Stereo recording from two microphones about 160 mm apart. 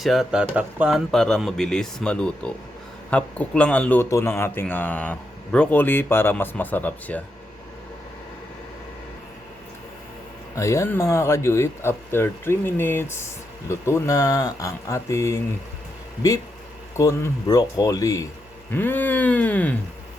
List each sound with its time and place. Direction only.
0.0 s a man's voice: centre (ahead or behind)
10.5 s speech: 20° left (ahead or behind)
17.0 s speech: 20° left (ahead or behind)